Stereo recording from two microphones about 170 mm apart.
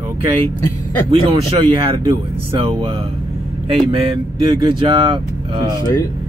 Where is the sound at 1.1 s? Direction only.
35° right (ahead or behind).